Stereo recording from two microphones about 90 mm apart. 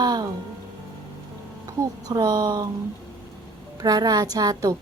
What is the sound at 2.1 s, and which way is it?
Speech, 45° right (ahead or behind).